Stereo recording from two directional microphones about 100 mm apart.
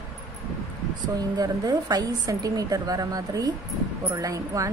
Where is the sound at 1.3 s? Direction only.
40° right (ahead or behind).